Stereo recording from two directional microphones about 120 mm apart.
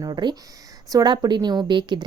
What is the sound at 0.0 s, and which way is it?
A woman's voice, 40° right (ahead or behind).